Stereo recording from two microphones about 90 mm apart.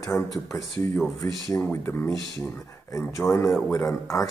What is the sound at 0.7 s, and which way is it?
Mantra, 25° left (ahead or behind).